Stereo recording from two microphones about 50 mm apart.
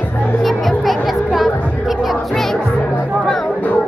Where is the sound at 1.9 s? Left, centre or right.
Centre.